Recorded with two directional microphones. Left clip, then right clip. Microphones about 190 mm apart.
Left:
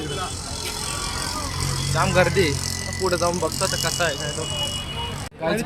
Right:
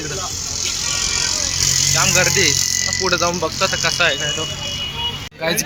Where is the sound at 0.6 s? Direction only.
55° left (ahead or behind).